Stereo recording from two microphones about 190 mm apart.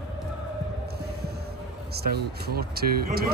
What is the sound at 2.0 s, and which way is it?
Speech, 55° right (ahead or behind).